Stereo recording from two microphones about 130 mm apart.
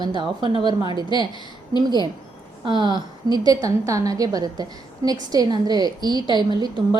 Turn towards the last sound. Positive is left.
turn(degrees=-35)  # may be behind; listen again after turning